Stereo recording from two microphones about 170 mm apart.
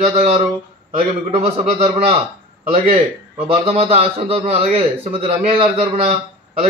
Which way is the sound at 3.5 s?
35° right (ahead or behind).